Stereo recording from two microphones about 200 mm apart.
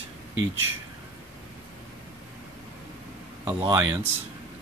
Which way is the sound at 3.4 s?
15° right (ahead or behind).